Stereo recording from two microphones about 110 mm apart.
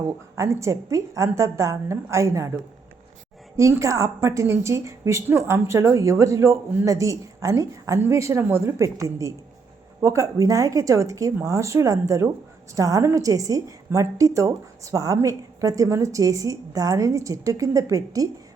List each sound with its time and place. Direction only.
0.3 s a woman's voice: 30° right (ahead or behind)
3.6 s a woman's voice: 30° right (ahead or behind)